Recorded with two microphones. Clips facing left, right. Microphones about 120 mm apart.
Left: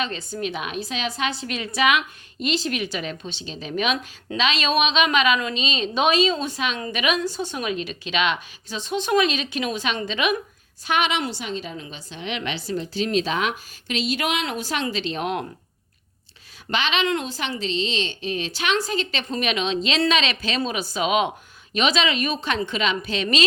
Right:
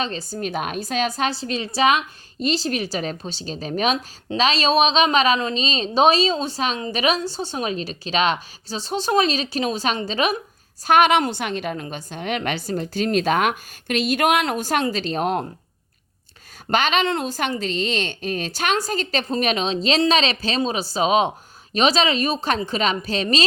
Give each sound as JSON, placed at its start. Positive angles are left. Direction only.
{"t": 0.0, "sound": "a woman's voice", "side_deg": -35}
{"t": 10.8, "sound": "a woman's voice", "side_deg": -50}
{"t": 16.6, "sound": "a woman's voice", "side_deg": -45}